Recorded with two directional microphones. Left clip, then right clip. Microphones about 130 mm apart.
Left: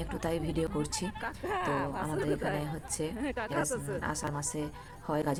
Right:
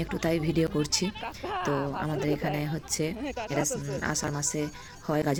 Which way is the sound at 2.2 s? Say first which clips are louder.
Right 3 dB; 30° right (ahead or behind).